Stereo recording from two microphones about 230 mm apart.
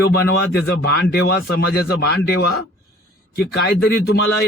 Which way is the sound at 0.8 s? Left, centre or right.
Left.